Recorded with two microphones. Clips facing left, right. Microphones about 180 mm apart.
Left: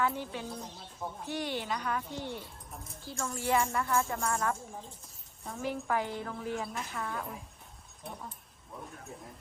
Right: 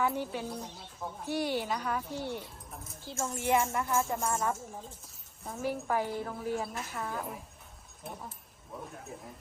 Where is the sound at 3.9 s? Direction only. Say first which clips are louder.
Right 1 dB; 5° right (ahead or behind).